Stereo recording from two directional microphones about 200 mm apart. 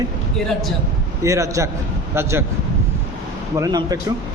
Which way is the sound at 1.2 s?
15° right (ahead or behind).